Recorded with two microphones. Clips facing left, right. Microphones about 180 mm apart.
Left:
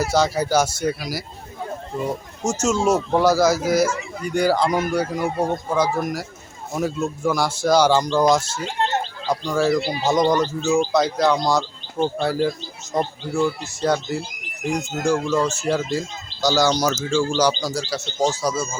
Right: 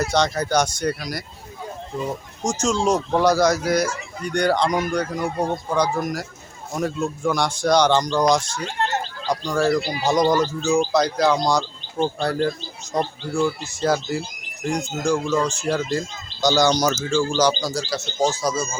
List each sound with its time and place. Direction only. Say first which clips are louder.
0.0 s speech: left 1 dB; 5° left (ahead or behind)
2.4 s speech: left 1 dB; 5° left (ahead or behind)
8.8 s a sound: left 1 dB; 20° left (ahead or behind)
9.2 s speech: even; 5° left (ahead or behind)